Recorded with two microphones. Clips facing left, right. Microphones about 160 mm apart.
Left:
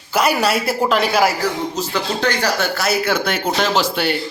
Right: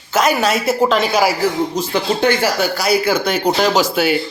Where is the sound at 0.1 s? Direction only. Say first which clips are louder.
Right 2 dB; 5° left (ahead or behind).